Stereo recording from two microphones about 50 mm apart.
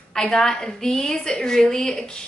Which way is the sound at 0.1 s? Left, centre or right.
Centre.